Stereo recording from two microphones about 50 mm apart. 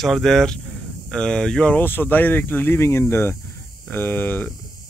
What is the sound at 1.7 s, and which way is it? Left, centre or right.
Speech, left.